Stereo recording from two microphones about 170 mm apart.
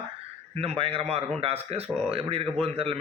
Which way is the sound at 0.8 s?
35° right (ahead or behind).